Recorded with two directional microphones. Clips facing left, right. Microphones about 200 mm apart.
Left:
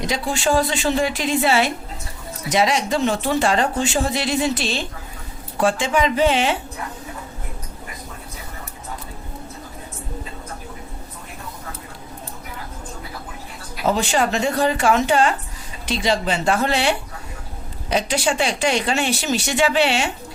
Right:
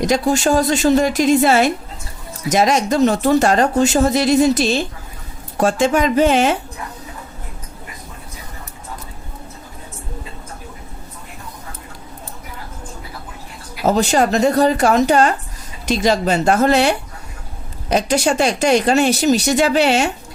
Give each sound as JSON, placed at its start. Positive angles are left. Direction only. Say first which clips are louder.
{"t": 0.0, "sound": "a woman's voice", "louder": "right 6 dB", "side_deg": -45}
{"t": 13.8, "sound": "a woman's voice", "louder": "right 4 dB", "side_deg": -40}